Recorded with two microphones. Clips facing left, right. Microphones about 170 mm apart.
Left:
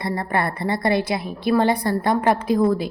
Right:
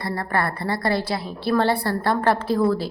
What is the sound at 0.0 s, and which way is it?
A woman's voice, 20° left (ahead or behind).